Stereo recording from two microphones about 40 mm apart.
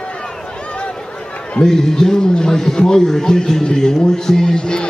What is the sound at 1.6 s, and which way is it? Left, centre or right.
A man's voice, centre.